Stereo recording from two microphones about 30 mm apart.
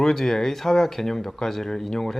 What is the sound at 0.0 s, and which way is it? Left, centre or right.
Speech, centre.